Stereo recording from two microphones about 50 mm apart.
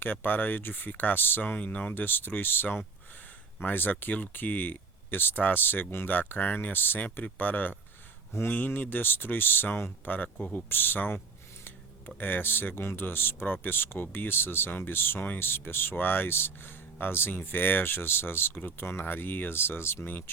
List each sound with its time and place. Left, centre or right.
0.0 s speech: left
6.1 s speech: left
8.3 s speech: left
8.5 s speech: left
20.1 s speech: left